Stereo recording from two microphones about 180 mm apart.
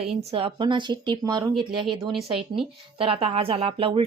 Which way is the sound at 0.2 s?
35° right (ahead or behind).